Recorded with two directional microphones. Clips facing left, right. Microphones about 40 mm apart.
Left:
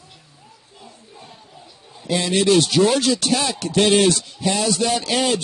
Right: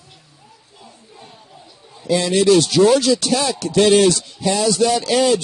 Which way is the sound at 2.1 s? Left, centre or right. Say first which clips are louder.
Right 3 dB; left.